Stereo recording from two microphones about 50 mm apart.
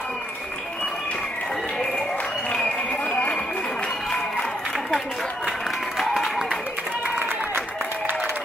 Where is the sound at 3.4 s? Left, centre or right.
Centre.